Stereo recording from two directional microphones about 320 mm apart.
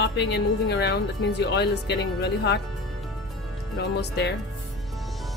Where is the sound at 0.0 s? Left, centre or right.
Left.